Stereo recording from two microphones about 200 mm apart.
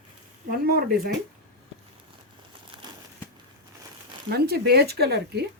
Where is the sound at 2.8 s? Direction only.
20° right (ahead or behind).